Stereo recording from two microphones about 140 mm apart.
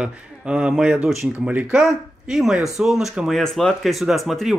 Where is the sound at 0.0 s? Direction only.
5° right (ahead or behind).